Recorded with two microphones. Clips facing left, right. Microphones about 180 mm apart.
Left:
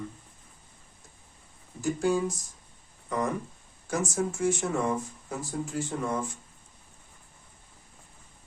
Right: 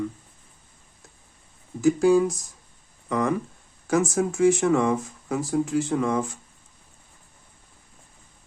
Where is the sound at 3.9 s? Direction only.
90° right.